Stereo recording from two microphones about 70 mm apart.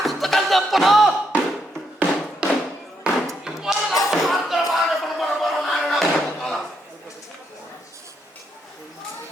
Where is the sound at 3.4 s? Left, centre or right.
Centre.